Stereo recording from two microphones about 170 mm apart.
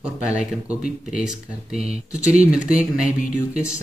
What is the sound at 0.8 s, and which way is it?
Speech, 50° left (ahead or behind).